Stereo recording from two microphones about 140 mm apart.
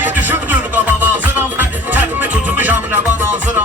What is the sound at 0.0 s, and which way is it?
Music, 10° right (ahead or behind).